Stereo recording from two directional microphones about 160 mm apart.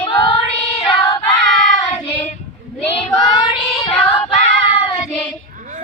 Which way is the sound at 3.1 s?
25° left (ahead or behind).